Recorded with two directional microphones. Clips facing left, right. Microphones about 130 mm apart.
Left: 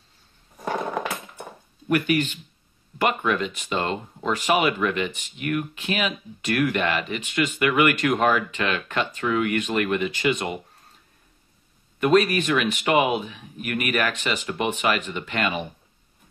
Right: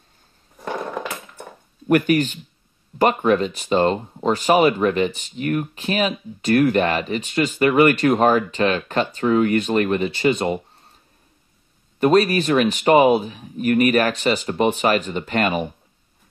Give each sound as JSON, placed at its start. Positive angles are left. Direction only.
{"t": 1.9, "sound": "speech", "side_deg": -45}
{"t": 12.0, "sound": "speech", "side_deg": -35}